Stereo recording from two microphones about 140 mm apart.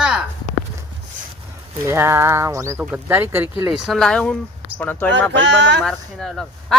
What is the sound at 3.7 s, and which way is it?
Speech, 5° right (ahead or behind).